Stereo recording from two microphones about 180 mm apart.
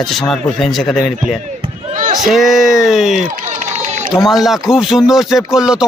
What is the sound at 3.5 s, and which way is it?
Run, 40° right (ahead or behind).